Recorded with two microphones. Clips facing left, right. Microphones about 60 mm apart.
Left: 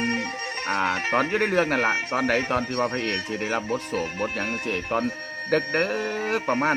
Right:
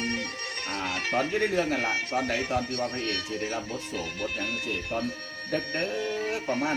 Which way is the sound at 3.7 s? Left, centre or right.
Left.